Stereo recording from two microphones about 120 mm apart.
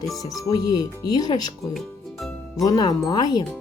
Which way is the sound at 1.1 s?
35° left (ahead or behind).